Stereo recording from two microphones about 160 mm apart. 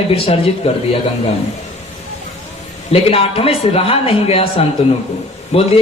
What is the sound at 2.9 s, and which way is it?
A man's voice, 35° left (ahead or behind).